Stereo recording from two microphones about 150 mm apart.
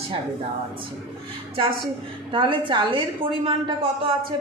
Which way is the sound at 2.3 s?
35° right (ahead or behind).